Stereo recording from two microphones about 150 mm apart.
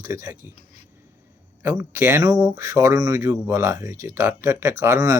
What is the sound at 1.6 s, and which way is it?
Speech, 15° right (ahead or behind).